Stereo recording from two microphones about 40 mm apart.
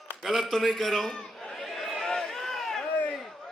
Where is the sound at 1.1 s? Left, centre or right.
Centre.